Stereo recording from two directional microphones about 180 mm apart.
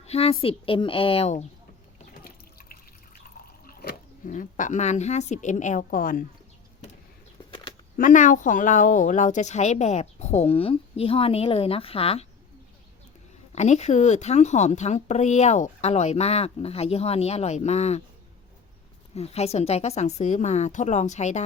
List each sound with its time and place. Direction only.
0.0 s speech: 35° left (ahead or behind)
2.2 s water: 55° left (ahead or behind)
3.7 s pig: 60° left (ahead or behind)
4.3 s a woman's voice: 45° left (ahead or behind)
7.9 s speech: 45° left (ahead or behind)
13.5 s speech: 40° left (ahead or behind)
19.1 s speech: 35° left (ahead or behind)